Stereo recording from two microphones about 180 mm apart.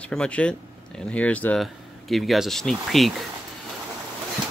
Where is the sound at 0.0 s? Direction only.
5° left (ahead or behind).